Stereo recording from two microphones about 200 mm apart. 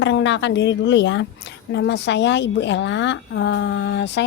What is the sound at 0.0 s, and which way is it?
A woman's voice, 65° left (ahead or behind).